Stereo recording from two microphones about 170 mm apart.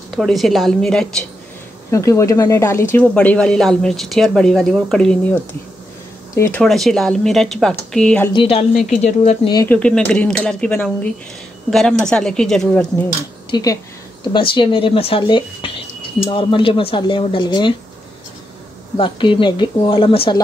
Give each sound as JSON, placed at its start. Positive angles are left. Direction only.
{"t": 0.1, "sound": "speech", "side_deg": 0}
{"t": 1.9, "sound": "speech", "side_deg": 20}
{"t": 6.6, "sound": "speech", "side_deg": 0}
{"t": 8.3, "sound": "speech", "side_deg": 30}
{"t": 9.7, "sound": "speech", "side_deg": 5}
{"t": 13.5, "sound": "speech", "side_deg": 20}
{"t": 18.9, "sound": "speech", "side_deg": 30}